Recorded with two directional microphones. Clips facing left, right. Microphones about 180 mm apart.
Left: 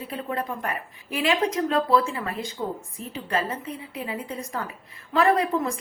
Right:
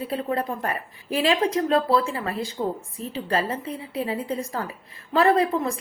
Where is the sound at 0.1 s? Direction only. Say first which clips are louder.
Right 2 dB; 35° right (ahead or behind).